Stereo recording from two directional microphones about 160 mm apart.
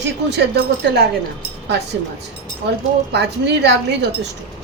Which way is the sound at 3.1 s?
90° right.